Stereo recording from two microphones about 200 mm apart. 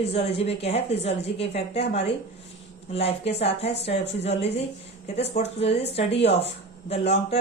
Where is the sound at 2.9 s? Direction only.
30° left (ahead or behind).